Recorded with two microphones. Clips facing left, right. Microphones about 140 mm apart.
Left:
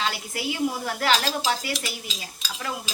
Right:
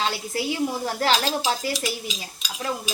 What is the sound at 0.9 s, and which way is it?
Speech, 35° right (ahead or behind).